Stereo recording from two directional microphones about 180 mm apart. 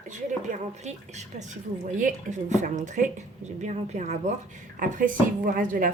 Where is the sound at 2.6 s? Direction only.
45° right (ahead or behind).